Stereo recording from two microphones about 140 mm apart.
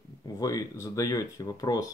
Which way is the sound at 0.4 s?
25° left (ahead or behind).